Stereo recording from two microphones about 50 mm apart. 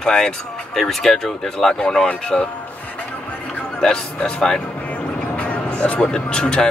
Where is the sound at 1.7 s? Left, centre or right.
Centre.